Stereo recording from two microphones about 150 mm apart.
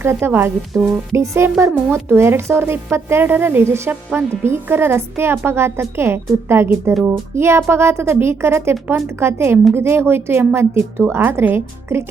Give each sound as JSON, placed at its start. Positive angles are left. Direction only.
{"t": 0.0, "sound": "a woman's voice", "side_deg": -15}
{"t": 0.7, "sound": "music", "side_deg": 0}
{"t": 1.1, "sound": "a woman's voice", "side_deg": -20}